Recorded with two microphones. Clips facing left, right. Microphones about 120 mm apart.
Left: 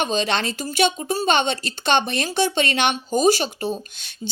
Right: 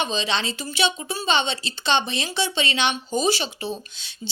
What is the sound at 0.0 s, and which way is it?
A woman's voice, 50° left (ahead or behind).